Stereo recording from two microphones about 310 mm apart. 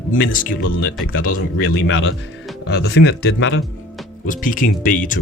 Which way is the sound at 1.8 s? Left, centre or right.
Left.